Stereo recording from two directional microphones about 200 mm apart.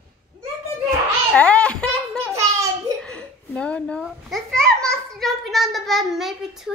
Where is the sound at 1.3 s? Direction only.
5° left (ahead or behind).